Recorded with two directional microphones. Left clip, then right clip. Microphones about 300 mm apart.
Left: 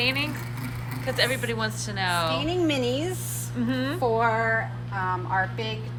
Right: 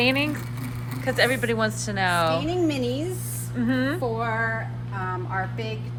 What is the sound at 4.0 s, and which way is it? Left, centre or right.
Music, centre.